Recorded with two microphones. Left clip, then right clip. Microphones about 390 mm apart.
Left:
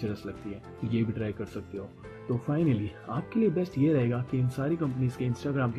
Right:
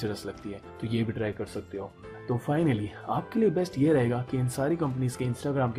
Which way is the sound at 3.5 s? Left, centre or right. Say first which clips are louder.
Right 2 dB; centre.